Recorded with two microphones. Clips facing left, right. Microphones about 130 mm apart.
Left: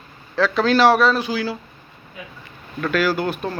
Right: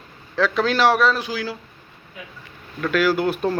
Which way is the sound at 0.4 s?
5° right (ahead or behind).